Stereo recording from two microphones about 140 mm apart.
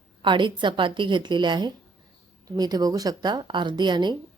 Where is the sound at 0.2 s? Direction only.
35° right (ahead or behind).